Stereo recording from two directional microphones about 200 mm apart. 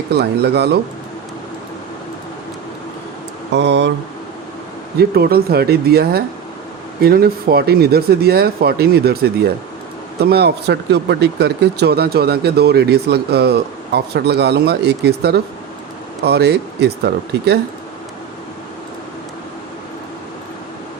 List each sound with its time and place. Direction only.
0.1 s speech: 55° right (ahead or behind)
3.5 s speech: 60° right (ahead or behind)
4.9 s speech: 50° right (ahead or behind)